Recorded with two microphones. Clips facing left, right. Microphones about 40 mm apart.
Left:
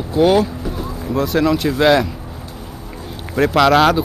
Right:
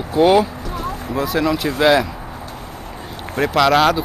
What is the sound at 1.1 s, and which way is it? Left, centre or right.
Speech, centre.